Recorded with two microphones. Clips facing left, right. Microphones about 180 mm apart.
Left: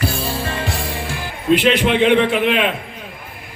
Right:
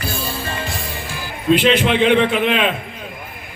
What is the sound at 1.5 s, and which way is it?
A man's voice, 60° left (ahead or behind).